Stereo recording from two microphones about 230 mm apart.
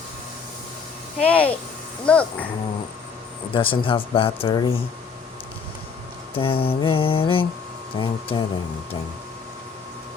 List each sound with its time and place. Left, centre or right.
1.2 s speech: centre
3.5 s speech: left
6.3 s speech: left